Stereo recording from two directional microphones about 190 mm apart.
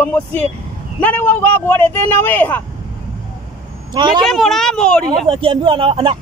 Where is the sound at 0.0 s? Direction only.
10° left (ahead or behind).